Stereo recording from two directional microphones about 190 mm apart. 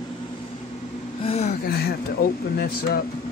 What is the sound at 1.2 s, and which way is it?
Speech, 35° left (ahead or behind).